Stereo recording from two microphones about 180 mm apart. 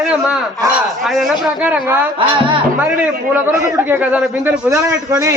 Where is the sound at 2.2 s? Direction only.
30° right (ahead or behind).